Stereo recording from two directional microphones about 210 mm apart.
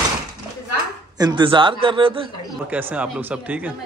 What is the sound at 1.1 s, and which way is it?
Speech, 20° right (ahead or behind).